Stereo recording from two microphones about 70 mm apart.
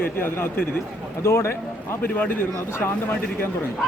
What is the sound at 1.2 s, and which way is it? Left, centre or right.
Speech, left.